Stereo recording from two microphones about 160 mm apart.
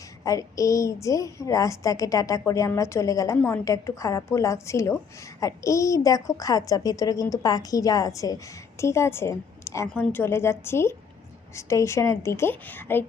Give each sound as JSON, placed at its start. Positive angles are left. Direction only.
{"t": 0.3, "sound": "a woman's voice", "side_deg": 20}